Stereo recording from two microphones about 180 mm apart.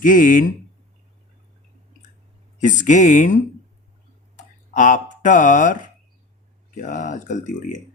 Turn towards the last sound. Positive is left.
turn(degrees=45)  # may be behind; listen again after turning